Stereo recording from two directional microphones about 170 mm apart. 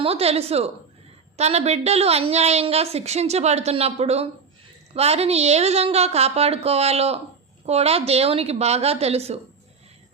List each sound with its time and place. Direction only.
0.0 s a woman's voice: 35° right (ahead or behind)